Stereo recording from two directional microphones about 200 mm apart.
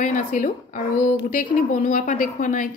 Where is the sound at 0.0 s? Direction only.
40° left (ahead or behind).